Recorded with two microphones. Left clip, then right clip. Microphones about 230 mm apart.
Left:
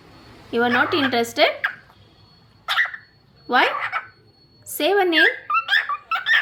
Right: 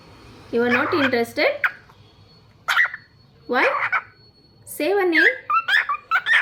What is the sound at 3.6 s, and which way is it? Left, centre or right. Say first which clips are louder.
Speech: right 3 dB; right.